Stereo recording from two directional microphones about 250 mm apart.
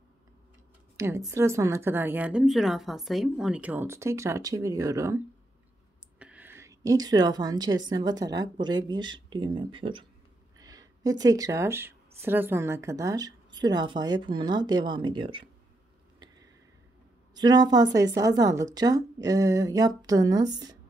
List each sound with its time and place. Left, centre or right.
0.9 s a woman's voice: centre
17.3 s a woman's voice: centre